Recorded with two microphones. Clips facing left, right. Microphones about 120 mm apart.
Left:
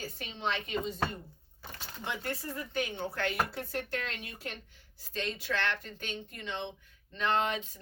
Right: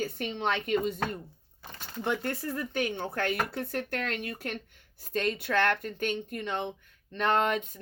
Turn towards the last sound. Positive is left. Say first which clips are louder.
# right 4 dB
turn(degrees=-50)  # may be behind; listen again after turning